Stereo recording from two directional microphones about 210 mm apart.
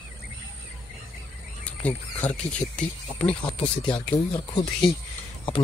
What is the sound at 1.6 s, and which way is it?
Speech, 5° left (ahead or behind).